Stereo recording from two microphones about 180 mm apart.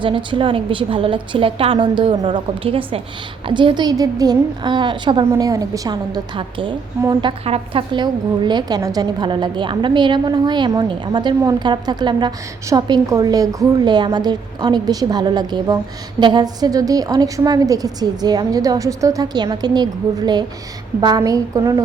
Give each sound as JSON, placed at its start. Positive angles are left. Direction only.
{"t": 0.0, "sound": "a woman's voice", "side_deg": -25}